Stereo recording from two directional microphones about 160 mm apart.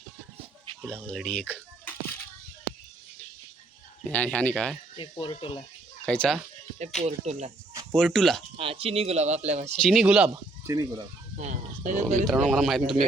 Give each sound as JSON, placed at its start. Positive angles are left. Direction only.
{"t": 1.1, "sound": "speech", "side_deg": 5}
{"t": 4.0, "sound": "speech", "side_deg": 10}
{"t": 4.9, "sound": "speech", "side_deg": 30}
{"t": 6.1, "sound": "speech", "side_deg": 5}
{"t": 7.0, "sound": "speech", "side_deg": -45}
{"t": 7.9, "sound": "speech", "side_deg": 5}
{"t": 8.5, "sound": "speech", "side_deg": -35}
{"t": 9.7, "sound": "speech", "side_deg": 0}
{"t": 10.7, "sound": "speech", "side_deg": -20}
{"t": 11.3, "sound": "speech", "side_deg": -50}
{"t": 12.5, "sound": "speech", "side_deg": 0}